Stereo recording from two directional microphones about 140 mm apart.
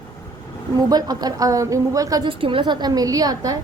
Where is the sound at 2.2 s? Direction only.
40° right (ahead or behind).